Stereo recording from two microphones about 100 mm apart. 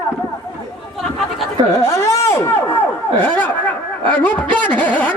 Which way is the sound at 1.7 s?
30° left (ahead or behind).